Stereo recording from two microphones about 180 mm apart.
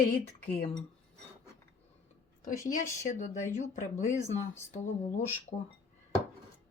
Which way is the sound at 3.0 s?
45° left (ahead or behind).